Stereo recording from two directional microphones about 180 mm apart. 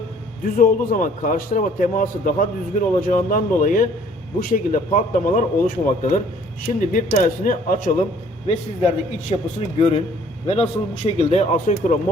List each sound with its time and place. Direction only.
0.4 s a man's voice: 55° left (ahead or behind)
9.3 s a man's voice: 35° left (ahead or behind)